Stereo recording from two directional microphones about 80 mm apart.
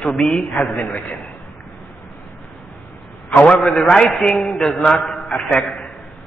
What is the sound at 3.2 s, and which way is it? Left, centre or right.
Speech, centre.